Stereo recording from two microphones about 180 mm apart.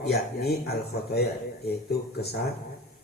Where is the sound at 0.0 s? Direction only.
60° left (ahead or behind).